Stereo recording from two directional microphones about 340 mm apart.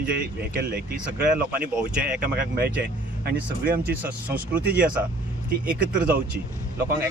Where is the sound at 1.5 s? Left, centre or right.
Centre.